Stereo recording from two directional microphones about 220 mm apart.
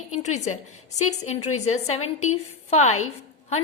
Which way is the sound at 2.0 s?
80° left.